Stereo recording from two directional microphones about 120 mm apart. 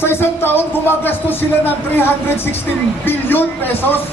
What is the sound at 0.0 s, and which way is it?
Speech, 20° left (ahead or behind).